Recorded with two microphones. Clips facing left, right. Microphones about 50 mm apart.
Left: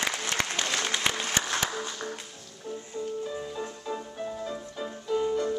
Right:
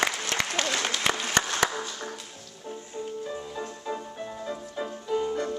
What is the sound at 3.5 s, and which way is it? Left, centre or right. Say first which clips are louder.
Music: right 1 dB; centre.